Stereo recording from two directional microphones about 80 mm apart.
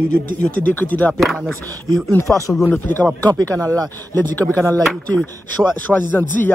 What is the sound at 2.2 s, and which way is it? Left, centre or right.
Speech, left.